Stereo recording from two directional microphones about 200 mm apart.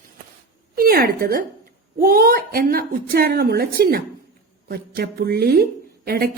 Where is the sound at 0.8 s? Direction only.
50° right (ahead or behind).